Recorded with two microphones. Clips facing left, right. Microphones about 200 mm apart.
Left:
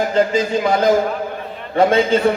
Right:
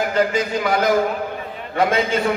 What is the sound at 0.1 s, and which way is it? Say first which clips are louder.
A man's voice: left 3 dB; 25° left (ahead or behind).